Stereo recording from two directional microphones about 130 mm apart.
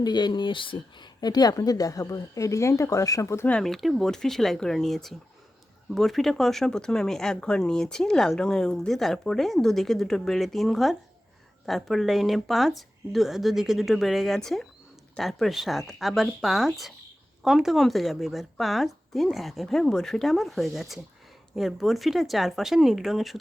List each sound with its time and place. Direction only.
0.0 s speech: 35° left (ahead or behind)
3.5 s speech: centre (ahead or behind)